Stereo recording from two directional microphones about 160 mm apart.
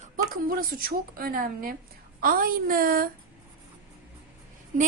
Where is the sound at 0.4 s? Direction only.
65° right (ahead or behind).